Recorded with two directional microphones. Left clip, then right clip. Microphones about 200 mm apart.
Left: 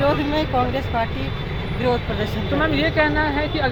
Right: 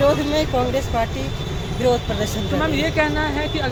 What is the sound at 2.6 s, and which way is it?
Speech, 10° left (ahead or behind).